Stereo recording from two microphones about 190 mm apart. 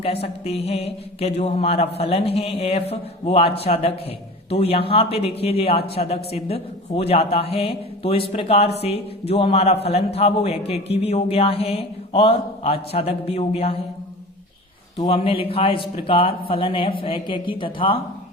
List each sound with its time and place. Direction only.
0.0 s a man's voice: 30° left (ahead or behind)
14.9 s a man's voice: 25° left (ahead or behind)